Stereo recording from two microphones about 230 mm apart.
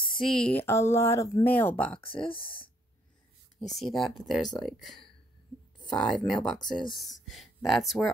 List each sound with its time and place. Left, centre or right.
0.2 s speech: centre
2.1 s speech: left
3.7 s speech: centre